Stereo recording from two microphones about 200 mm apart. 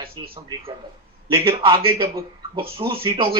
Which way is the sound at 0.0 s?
25° right (ahead or behind).